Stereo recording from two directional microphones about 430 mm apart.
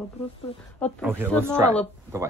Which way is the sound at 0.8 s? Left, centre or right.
Centre.